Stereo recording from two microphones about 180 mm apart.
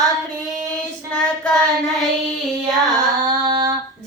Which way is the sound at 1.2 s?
Centre (ahead or behind).